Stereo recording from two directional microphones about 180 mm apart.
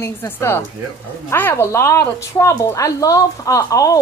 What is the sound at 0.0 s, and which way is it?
A woman's voice, 15° left (ahead or behind).